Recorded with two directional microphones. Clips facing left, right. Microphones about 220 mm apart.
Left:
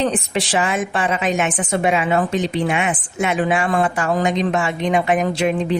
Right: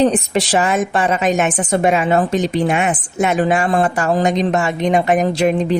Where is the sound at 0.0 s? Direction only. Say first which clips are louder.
Right 5 dB; 40° right (ahead or behind).